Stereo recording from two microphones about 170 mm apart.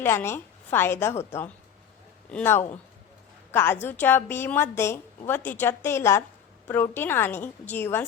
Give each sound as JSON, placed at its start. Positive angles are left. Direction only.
{"t": 0.0, "sound": "a woman's voice", "side_deg": 15}